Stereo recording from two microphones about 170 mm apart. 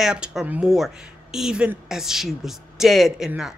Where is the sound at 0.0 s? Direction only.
5° right (ahead or behind).